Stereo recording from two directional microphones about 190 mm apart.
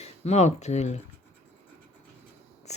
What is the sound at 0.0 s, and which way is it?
Speech, 35° left (ahead or behind).